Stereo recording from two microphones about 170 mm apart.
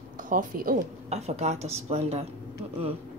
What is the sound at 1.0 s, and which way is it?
A woman's voice, 40° right (ahead or behind).